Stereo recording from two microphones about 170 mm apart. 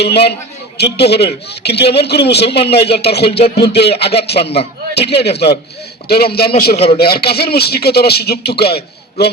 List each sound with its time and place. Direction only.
0.0 s a man's voice: 75° left (ahead or behind)
3.3 s a sound: 35° left (ahead or behind)
3.7 s a man's voice: 75° left (ahead or behind)